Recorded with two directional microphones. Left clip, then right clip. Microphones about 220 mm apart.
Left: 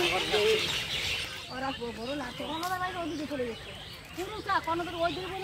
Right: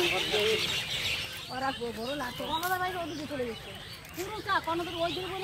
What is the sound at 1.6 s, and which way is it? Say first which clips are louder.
Speech: right 3 dB; 50° right (ahead or behind).